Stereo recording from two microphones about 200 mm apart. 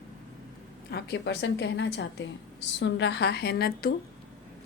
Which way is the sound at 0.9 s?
55° left (ahead or behind).